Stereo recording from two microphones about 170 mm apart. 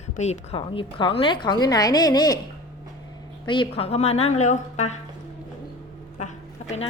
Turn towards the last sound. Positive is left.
turn(degrees=40)  # may be behind; listen again after turning